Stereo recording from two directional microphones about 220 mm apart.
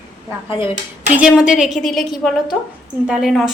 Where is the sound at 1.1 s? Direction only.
5° right (ahead or behind).